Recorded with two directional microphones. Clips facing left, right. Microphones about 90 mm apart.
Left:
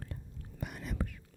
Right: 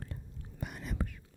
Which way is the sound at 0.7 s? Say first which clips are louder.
Even; 20° right (ahead or behind).